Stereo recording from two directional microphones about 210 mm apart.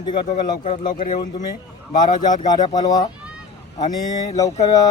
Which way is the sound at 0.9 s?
35° left (ahead or behind).